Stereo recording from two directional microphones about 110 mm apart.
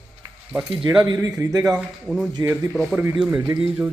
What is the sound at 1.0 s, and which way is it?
Speech, 35° right (ahead or behind).